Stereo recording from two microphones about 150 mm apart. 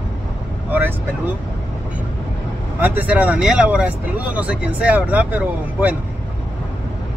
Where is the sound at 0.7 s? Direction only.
10° right (ahead or behind).